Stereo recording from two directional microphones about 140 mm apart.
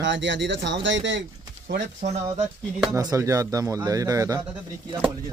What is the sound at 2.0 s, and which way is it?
Speech, 55° right (ahead or behind).